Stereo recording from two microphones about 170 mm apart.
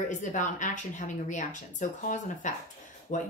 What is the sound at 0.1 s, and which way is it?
A woman's voice, 45° left (ahead or behind).